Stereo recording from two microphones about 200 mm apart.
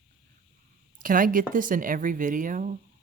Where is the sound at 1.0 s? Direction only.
45° right (ahead or behind).